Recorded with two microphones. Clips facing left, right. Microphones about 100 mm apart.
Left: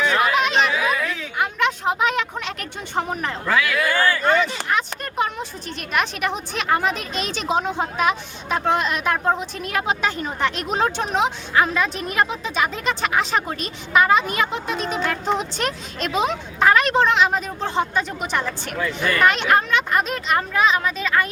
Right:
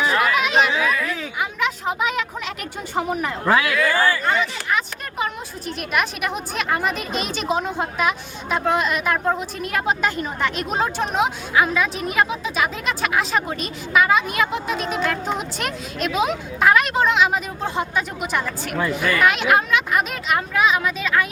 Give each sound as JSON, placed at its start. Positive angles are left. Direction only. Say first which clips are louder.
{"t": 0.0, "sound": "chatter", "louder": "even", "side_deg": -5}
{"t": 1.4, "sound": "a sound", "louder": "left 4 dB", "side_deg": 0}
{"t": 3.4, "sound": "speech", "louder": "right 3 dB", "side_deg": -30}
{"t": 3.9, "sound": "a woman's voice", "louder": "left 1 dB", "side_deg": -10}